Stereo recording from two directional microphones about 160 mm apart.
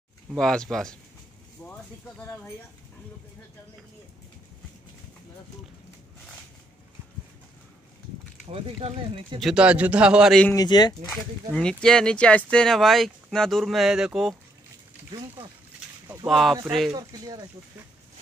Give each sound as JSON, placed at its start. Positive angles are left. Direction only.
{"t": 0.4, "sound": "speech", "side_deg": 5}
{"t": 8.5, "sound": "speech", "side_deg": -35}
{"t": 9.4, "sound": "a man's voice", "side_deg": -5}
{"t": 10.5, "sound": "speech", "side_deg": 25}
{"t": 11.1, "sound": "speech", "side_deg": 5}
{"t": 16.3, "sound": "speech", "side_deg": 0}
{"t": 16.9, "sound": "speech", "side_deg": -25}